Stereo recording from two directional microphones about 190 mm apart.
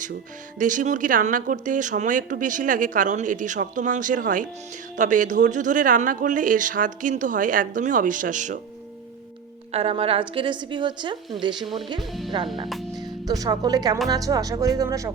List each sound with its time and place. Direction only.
0.6 s speech: 45° right (ahead or behind)
9.7 s a woman's voice: 30° right (ahead or behind)
11.6 s speech: centre (ahead or behind)
12.6 s music: centre (ahead or behind)
13.0 s speech: 20° right (ahead or behind)